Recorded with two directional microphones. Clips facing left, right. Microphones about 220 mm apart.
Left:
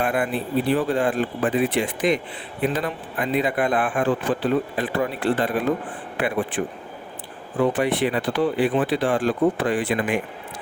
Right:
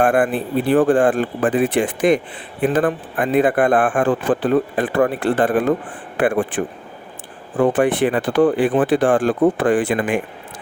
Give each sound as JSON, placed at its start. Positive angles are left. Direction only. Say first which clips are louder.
{"t": 0.0, "sound": "a man's voice", "louder": "right 7 dB", "side_deg": -50}